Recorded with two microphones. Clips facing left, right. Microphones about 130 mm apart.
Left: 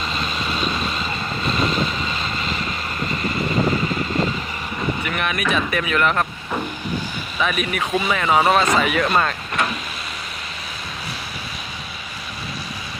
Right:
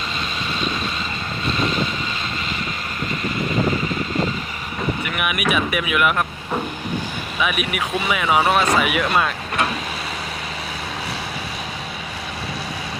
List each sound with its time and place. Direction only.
5.0 s speech: 10° right (ahead or behind)
7.4 s speech: 5° right (ahead or behind)